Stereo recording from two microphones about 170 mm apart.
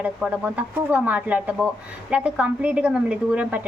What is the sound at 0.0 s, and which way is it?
Speech, 5° right (ahead or behind).